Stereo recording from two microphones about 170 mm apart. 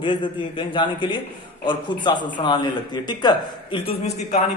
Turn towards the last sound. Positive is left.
turn(degrees=35)  # may be behind; listen again after turning